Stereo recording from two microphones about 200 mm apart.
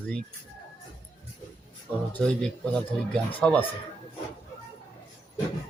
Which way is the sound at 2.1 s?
5° left (ahead or behind).